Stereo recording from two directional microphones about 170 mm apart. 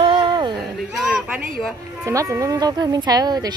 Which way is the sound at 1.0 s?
10° right (ahead or behind).